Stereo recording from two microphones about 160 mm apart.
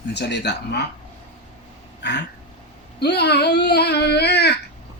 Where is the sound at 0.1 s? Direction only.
90° left.